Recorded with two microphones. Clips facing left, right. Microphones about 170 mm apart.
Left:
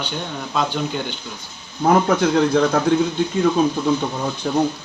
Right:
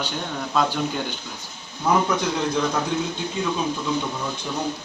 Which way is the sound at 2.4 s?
65° left (ahead or behind).